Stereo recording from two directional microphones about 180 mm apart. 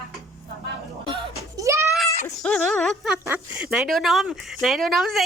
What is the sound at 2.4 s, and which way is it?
Speech, 5° left (ahead or behind).